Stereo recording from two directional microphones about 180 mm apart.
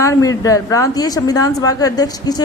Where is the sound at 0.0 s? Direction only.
15° left (ahead or behind).